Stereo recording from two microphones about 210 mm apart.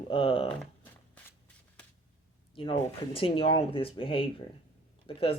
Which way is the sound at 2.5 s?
25° left (ahead or behind).